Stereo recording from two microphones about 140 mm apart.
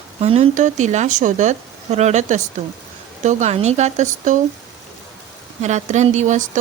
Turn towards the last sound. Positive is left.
turn(degrees=-60)  # may be behind; listen again after turning